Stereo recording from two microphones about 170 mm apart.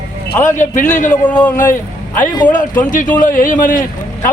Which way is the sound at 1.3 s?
5° left (ahead or behind).